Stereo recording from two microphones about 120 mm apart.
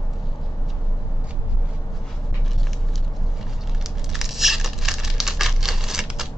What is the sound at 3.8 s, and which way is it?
Tearing, centre (ahead or behind).